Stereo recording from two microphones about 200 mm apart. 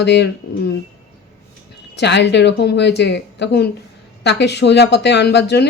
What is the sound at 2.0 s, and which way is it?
Speech, 60° left (ahead or behind).